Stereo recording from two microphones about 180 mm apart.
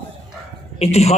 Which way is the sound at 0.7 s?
35° left (ahead or behind).